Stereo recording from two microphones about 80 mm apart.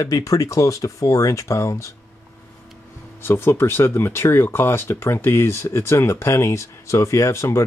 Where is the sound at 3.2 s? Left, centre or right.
Left.